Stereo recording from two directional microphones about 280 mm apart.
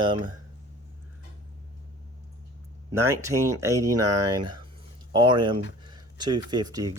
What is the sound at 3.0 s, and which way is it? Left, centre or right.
Speech, centre.